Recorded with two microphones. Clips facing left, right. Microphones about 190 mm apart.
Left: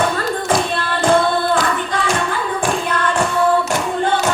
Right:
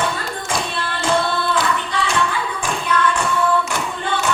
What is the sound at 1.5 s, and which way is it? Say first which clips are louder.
Hands: left 3 dB; 50° left (ahead or behind).